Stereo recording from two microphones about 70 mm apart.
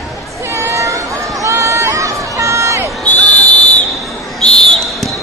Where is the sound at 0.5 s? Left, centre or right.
Right.